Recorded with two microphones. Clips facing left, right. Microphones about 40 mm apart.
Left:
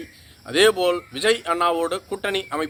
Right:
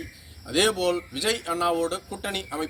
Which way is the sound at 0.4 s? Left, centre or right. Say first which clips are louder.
Left 6 dB; left.